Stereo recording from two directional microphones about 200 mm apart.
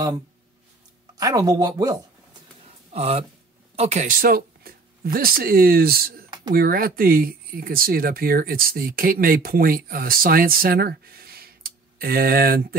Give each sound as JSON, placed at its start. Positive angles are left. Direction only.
{"t": 1.1, "sound": "speech", "side_deg": -20}
{"t": 2.9, "sound": "speech", "side_deg": -30}